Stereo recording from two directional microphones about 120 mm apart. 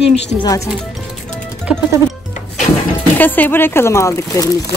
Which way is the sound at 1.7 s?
10° right (ahead or behind).